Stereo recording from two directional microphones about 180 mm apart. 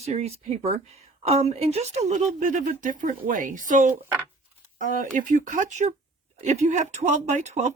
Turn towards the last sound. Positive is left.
turn(degrees=-40)  # may be behind; listen again after turning